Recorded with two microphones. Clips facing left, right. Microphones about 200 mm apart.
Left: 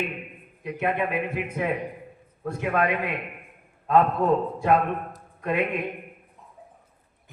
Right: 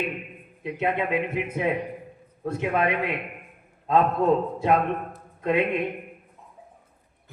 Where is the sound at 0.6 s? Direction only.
20° right (ahead or behind).